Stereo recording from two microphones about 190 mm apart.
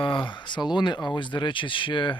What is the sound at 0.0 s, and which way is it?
Speech, 25° left (ahead or behind).